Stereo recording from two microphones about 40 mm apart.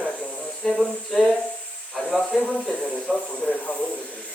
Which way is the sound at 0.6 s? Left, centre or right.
Centre.